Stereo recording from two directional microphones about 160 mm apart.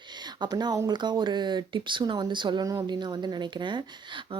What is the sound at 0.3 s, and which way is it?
Speech, 25° right (ahead or behind).